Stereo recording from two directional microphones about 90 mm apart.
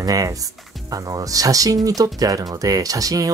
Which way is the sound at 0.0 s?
40° right (ahead or behind).